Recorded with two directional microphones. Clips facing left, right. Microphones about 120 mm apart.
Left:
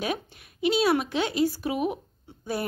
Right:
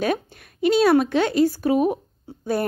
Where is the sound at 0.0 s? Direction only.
45° right (ahead or behind).